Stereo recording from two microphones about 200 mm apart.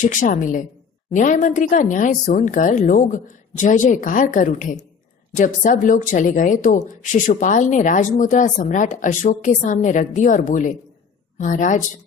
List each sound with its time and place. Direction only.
0.0 s speech: 40° left (ahead or behind)